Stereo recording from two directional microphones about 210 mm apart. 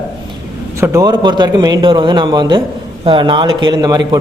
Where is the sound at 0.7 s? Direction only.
15° right (ahead or behind).